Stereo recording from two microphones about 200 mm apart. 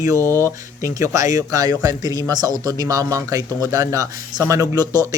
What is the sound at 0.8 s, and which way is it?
Speech, 15° right (ahead or behind).